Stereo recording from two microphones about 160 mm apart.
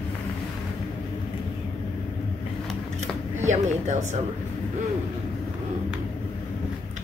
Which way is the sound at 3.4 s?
45° right (ahead or behind).